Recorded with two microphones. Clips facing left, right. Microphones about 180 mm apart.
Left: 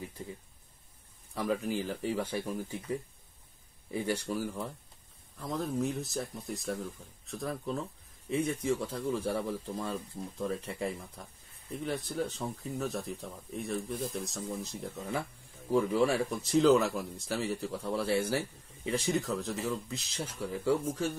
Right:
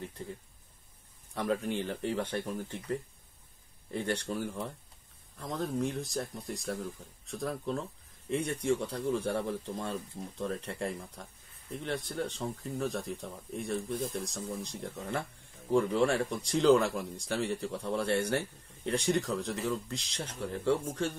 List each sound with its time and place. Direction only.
1.3 s speech: centre (ahead or behind)